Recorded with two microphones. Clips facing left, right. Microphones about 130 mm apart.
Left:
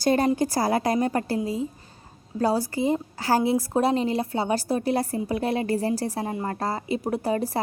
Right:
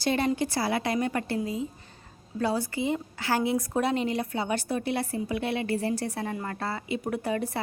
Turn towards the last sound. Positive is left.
turn(degrees=35)  # may be behind; listen again after turning